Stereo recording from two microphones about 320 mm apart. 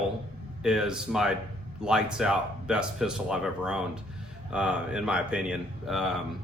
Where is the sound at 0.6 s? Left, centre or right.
Centre.